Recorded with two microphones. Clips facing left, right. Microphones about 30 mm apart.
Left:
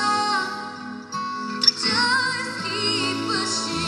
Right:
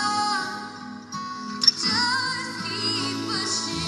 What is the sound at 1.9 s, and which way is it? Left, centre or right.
Music, centre.